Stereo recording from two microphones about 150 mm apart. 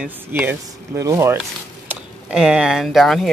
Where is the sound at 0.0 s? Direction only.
15° right (ahead or behind).